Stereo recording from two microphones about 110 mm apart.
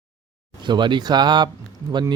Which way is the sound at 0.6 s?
45° right (ahead or behind).